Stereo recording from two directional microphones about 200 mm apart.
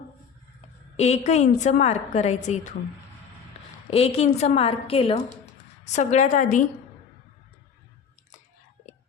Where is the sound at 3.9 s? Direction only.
30° left (ahead or behind).